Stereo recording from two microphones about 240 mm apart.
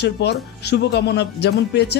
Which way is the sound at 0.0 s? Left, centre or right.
Left.